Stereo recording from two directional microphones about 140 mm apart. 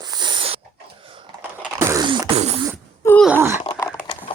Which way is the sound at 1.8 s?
20° right (ahead or behind).